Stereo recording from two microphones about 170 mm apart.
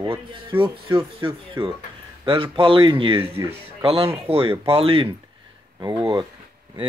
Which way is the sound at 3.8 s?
35° right (ahead or behind).